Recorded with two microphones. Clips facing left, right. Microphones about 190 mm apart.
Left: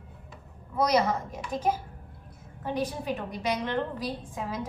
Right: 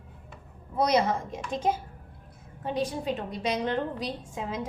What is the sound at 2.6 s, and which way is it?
A woman's voice, 25° right (ahead or behind).